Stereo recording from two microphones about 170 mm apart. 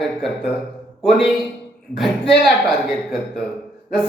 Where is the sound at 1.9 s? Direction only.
Centre (ahead or behind).